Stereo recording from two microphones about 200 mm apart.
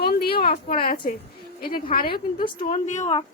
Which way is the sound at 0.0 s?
50° left (ahead or behind).